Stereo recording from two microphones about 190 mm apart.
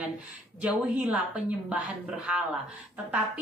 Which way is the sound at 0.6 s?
5° right (ahead or behind).